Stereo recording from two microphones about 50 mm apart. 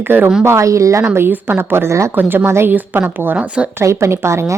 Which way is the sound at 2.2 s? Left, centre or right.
Right.